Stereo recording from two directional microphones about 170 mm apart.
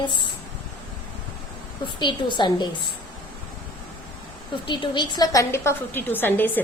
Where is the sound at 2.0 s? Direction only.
25° left (ahead or behind).